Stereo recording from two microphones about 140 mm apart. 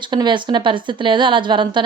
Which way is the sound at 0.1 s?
35° right (ahead or behind).